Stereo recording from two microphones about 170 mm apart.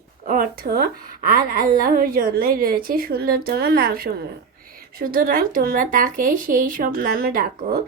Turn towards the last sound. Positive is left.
turn(degrees=-60)  # may be behind; listen again after turning